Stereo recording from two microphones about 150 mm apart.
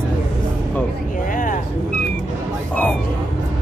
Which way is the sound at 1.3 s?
65° left (ahead or behind).